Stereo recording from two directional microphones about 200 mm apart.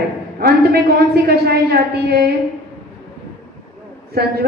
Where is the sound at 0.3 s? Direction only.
50° right (ahead or behind).